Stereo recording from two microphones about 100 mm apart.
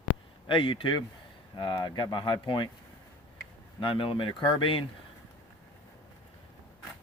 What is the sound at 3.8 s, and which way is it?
Speech, 60° left (ahead or behind).